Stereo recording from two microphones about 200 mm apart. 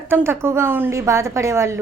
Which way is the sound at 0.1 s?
10° right (ahead or behind).